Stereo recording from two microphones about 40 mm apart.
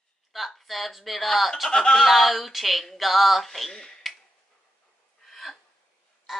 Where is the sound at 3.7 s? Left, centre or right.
Centre.